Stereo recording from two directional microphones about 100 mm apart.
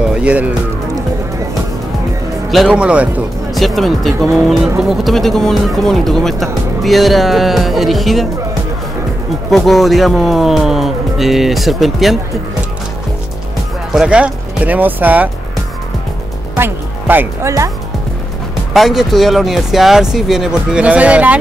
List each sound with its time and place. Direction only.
0.2 s speech: 15° right (ahead or behind)
2.5 s speech: 5° right (ahead or behind)
3.5 s speech: centre (ahead or behind)
9.5 s speech: centre (ahead or behind)
13.9 s speech: 10° right (ahead or behind)
16.5 s speech: 20° right (ahead or behind)
18.7 s speech: centre (ahead or behind)